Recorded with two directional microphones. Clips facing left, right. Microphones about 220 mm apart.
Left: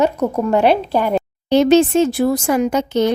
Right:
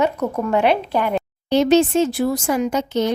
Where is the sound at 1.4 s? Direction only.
60° left (ahead or behind).